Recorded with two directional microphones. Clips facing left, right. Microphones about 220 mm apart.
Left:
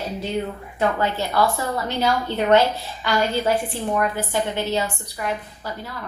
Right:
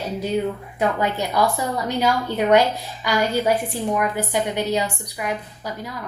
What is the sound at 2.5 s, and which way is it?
A woman's voice, 15° right (ahead or behind).